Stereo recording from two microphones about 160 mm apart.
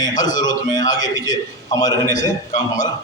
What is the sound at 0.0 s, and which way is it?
A man's voice, 25° left (ahead or behind).